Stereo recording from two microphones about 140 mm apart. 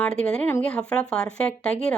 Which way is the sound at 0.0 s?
5° left (ahead or behind).